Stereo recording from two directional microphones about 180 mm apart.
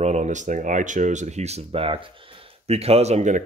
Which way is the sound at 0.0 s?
40° right (ahead or behind).